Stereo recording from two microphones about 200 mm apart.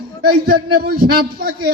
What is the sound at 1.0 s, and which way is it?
Speech, 50° right (ahead or behind).